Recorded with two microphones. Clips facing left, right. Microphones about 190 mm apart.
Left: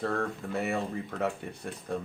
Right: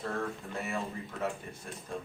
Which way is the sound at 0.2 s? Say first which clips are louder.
Left 5 dB; 65° left (ahead or behind).